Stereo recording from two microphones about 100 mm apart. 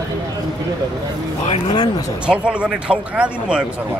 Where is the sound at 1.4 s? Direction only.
80° left.